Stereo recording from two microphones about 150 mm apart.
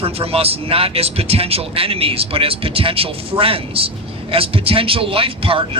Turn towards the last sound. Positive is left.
turn(degrees=-35)  # may be behind; listen again after turning